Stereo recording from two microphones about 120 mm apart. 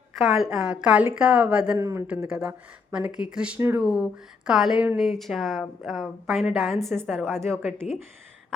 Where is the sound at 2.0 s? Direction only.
10° right (ahead or behind).